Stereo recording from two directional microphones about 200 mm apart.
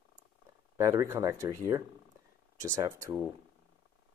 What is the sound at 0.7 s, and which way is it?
Speech, 15° right (ahead or behind).